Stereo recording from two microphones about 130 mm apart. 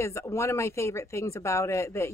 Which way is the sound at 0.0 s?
20° left (ahead or behind).